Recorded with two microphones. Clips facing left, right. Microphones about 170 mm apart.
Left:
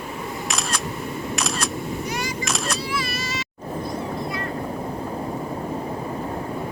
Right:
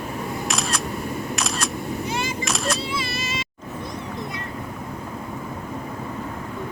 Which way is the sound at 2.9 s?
25° right (ahead or behind).